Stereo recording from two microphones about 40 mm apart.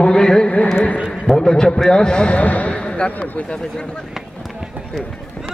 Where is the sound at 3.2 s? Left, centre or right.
Left.